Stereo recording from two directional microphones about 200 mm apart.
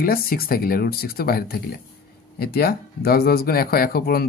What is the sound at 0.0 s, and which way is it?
Speech, 50° left (ahead or behind).